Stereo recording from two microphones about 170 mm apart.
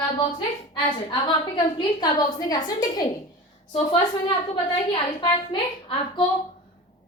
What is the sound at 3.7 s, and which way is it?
Speech, 30° left (ahead or behind).